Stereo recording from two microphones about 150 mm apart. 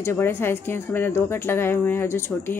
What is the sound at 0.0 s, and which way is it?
Speech, 15° left (ahead or behind).